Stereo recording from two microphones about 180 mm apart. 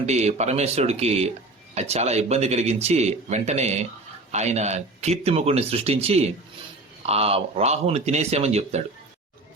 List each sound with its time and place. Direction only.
0.0 s speech: 40° right (ahead or behind)